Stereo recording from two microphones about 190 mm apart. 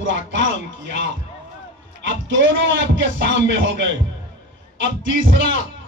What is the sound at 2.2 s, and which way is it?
Music, 80° right.